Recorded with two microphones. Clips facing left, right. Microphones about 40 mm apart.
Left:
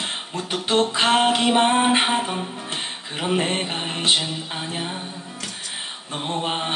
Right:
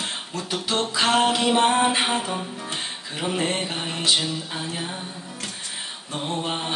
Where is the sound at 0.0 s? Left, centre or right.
Left.